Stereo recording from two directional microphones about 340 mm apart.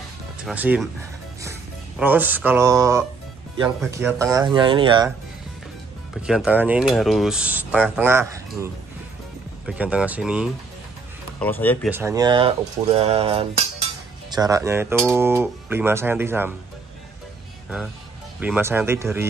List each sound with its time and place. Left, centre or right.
0.4 s speech: centre
6.2 s speech: centre
9.7 s speech: centre
11.9 s speech: centre
18.4 s speech: centre